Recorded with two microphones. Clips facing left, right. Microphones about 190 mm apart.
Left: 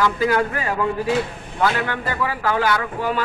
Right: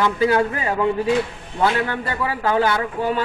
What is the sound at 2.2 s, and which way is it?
Speech, 25° right (ahead or behind).